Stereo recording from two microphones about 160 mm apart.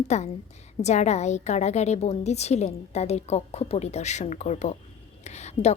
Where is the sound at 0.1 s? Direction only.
45° left (ahead or behind).